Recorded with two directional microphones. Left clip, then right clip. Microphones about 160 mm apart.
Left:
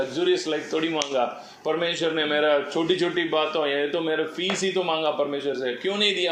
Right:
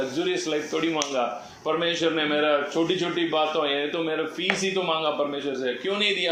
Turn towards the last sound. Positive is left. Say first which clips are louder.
# left 1 dB
turn(degrees=40)  # may be behind; listen again after turning